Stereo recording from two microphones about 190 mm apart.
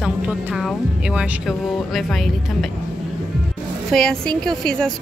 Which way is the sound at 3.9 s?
5° left (ahead or behind).